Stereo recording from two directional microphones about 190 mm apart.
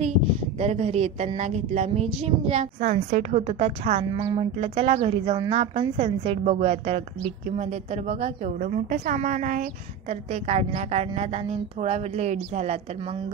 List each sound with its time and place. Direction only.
0.6 s a woman's voice: 35° right (ahead or behind)